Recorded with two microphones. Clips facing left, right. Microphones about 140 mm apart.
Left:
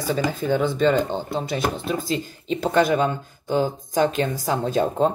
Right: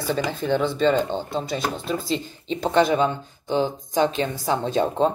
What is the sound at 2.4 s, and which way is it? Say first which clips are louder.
Speech: even; 30° right (ahead or behind).